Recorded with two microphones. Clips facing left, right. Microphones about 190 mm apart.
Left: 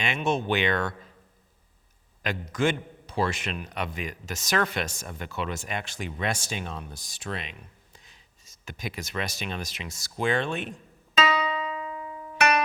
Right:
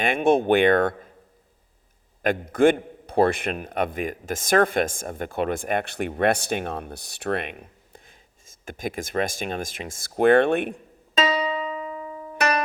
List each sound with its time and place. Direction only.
0.0 s a man's voice: 50° right (ahead or behind)
2.2 s a man's voice: 55° right (ahead or behind)
11.4 s music: 30° right (ahead or behind)